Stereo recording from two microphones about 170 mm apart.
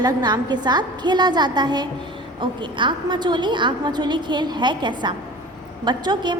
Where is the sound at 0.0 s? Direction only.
25° right (ahead or behind).